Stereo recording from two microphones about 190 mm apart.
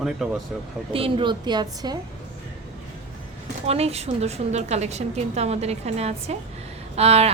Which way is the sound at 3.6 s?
35° right (ahead or behind).